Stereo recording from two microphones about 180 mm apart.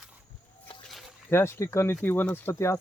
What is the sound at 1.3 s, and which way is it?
Speech, 15° left (ahead or behind).